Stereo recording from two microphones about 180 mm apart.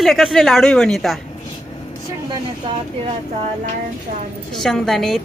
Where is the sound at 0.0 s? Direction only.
Centre (ahead or behind).